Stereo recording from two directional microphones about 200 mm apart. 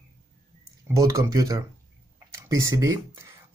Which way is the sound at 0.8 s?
15° right (ahead or behind).